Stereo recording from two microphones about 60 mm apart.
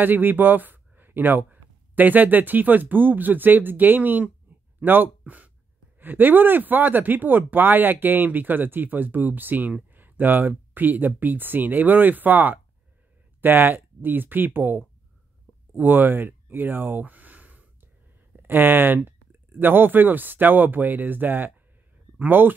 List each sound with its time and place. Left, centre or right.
0.0 s speech: right
4.5 s a sound: right
5.9 s speech: right